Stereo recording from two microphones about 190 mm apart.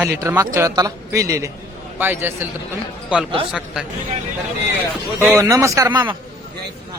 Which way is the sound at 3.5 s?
Centre (ahead or behind).